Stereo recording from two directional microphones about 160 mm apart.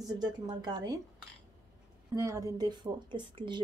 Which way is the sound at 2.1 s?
20° right (ahead or behind).